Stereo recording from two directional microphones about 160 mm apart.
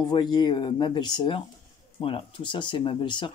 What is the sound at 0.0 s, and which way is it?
Speech, 25° left (ahead or behind).